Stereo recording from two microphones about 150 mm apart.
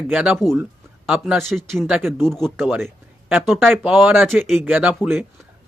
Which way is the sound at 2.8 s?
15° right (ahead or behind).